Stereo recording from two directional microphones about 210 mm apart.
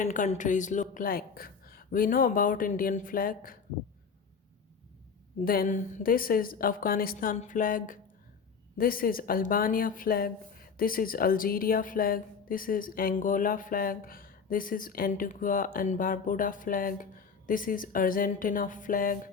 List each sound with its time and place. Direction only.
0.0 s a woman's voice: 40° left (ahead or behind)
5.5 s a woman's voice: 40° left (ahead or behind)